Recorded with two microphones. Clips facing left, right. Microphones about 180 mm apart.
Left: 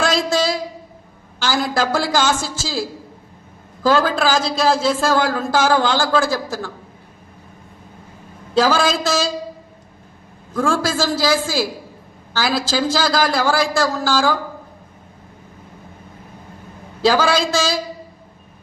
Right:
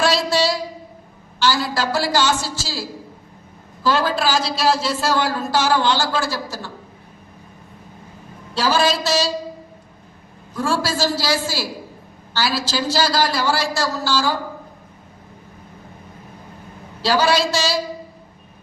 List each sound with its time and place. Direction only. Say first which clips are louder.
0.0 s a sound: even; 50° left (ahead or behind)
1.4 s a man's voice: left 1 dB; 50° left (ahead or behind)
3.8 s a man's voice: left 3 dB; 45° left (ahead or behind)
8.6 s a man's voice: right 2 dB; 50° left (ahead or behind)
10.5 s a man's voice: left 3 dB; 50° left (ahead or behind)
17.0 s a man's voice: left 2 dB; 50° left (ahead or behind)